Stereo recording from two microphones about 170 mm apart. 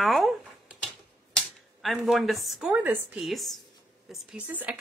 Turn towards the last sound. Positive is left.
turn(degrees=-10)  # may be behind; listen again after turning